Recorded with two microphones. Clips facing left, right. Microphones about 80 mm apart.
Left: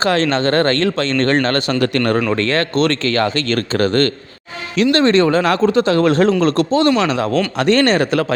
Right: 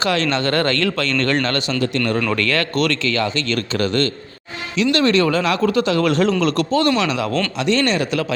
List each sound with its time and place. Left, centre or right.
0.0 s speech: left
1.8 s speech: left
2.3 s speech: left
3.2 s speech: left
7.6 s speech: left